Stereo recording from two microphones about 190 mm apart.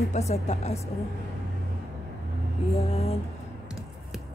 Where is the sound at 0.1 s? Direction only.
35° left (ahead or behind).